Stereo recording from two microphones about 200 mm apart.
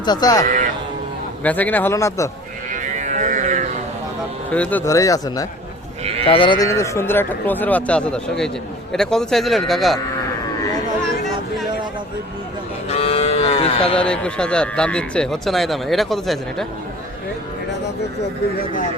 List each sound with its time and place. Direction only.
0.0 s speech: 20° left (ahead or behind)
1.5 s speech: 10° left (ahead or behind)
2.7 s music: 40° right (ahead or behind)
4.5 s speech: 5° left (ahead or behind)
12.9 s cattle: 30° left (ahead or behind)
13.9 s speech: 5° left (ahead or behind)
18.6 s speech: 40° left (ahead or behind)